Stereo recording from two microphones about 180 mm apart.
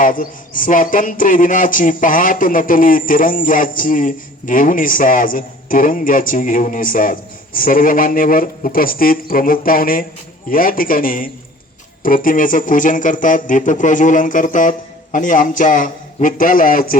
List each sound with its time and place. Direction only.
0.0 s a man's voice: 50° left (ahead or behind)